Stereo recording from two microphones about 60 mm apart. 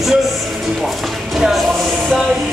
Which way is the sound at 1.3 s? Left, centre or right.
Centre.